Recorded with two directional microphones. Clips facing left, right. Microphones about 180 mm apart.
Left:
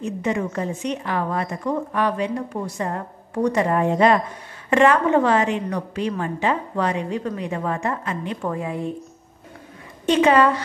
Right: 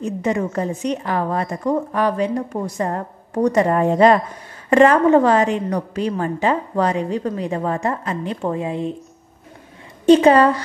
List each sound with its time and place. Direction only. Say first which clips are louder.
0.0 s a woman's voice: right 3 dB; 40° right (ahead or behind); by 8.9 s 20° right (ahead or behind)
10.0 s a woman's voice: right 5 dB; 35° right (ahead or behind)